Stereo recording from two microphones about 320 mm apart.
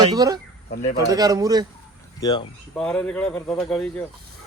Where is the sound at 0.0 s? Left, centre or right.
Centre.